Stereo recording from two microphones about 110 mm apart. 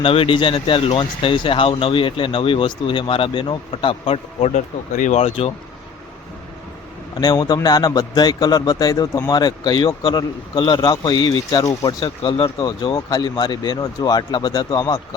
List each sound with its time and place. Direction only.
0.0 s speech: 55° left (ahead or behind)
5.0 s speech: 90° left
7.2 s a man's voice: 35° left (ahead or behind)
10.2 s speech: 50° left (ahead or behind)
10.8 s a man's voice: 40° left (ahead or behind)
11.9 s a man's voice: 45° left (ahead or behind)